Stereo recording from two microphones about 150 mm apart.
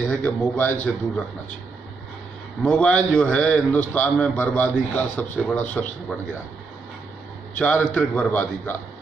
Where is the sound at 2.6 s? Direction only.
10° left (ahead or behind).